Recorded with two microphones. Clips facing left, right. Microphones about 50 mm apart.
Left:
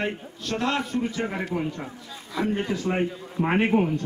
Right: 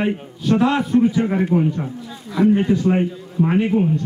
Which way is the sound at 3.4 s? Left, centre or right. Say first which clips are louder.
Right 4 dB; left.